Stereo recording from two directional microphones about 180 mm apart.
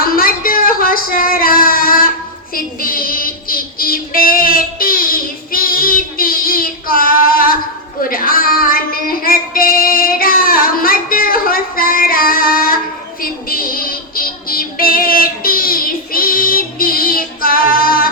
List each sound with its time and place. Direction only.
0.0 s a sound: 55° left (ahead or behind)
2.8 s child singing: 55° left (ahead or behind)
8.1 s female singing: 55° left (ahead or behind)
13.2 s music: 55° left (ahead or behind)